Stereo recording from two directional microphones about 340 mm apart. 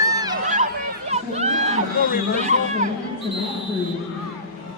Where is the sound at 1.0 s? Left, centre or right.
Centre.